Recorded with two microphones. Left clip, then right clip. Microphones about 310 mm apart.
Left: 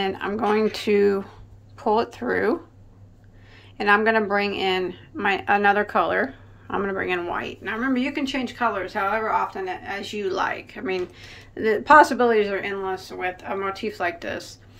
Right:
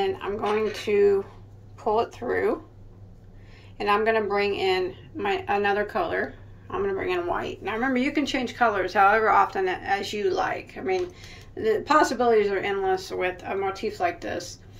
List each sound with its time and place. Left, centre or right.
0.0 s speech: centre
3.7 s speech: centre